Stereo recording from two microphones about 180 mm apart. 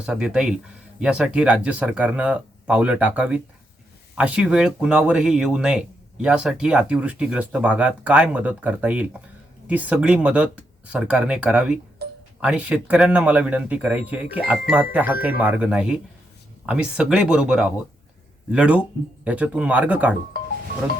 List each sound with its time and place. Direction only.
0.0 s speech: 5° right (ahead or behind)
12.0 s music: 65° right (ahead or behind)
12.4 s speech: 5° right (ahead or behind)